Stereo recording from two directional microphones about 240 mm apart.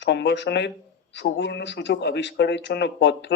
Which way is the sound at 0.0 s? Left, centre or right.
Left.